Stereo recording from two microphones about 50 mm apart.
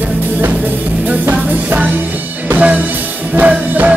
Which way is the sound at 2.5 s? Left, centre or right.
Right.